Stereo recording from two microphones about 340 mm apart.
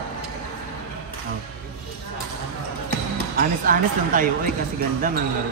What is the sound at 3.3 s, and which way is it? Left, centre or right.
Speech, right.